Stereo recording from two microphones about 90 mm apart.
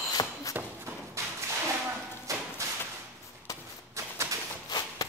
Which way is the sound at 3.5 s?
35° left (ahead or behind).